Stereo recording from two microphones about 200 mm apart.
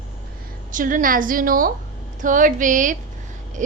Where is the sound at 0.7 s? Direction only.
40° right (ahead or behind).